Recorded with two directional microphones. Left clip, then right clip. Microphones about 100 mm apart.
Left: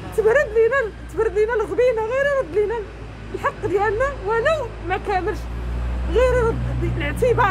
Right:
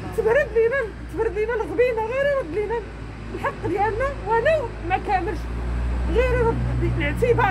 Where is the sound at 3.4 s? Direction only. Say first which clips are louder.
Left 2 dB; 30° left (ahead or behind).